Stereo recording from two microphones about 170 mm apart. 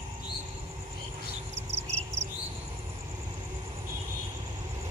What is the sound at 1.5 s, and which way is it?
Cricket, 40° right (ahead or behind).